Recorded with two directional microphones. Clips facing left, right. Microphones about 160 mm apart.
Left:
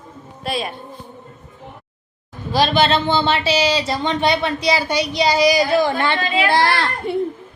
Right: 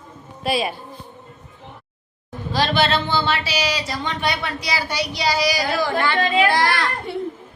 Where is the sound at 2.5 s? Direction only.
15° left (ahead or behind).